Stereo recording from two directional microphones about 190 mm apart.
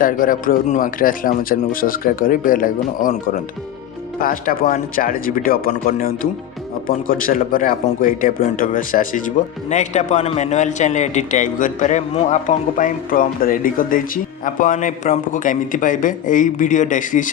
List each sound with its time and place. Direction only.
0.0 s a man's voice: 45° left (ahead or behind)